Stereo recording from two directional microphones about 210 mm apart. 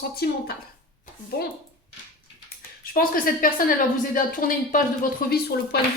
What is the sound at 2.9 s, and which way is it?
A woman's voice, 40° left (ahead or behind).